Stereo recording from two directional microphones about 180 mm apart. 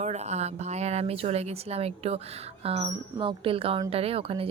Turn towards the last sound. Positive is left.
turn(degrees=-30)  # may be behind; listen again after turning